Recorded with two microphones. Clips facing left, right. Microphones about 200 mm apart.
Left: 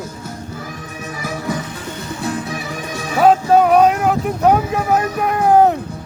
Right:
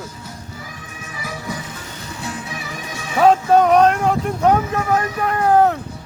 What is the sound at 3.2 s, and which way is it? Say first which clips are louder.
Vehicle: left 1 dB; 5° left (ahead or behind).